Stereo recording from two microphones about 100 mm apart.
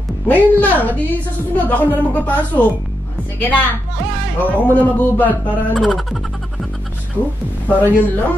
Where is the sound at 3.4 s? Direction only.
20° left (ahead or behind).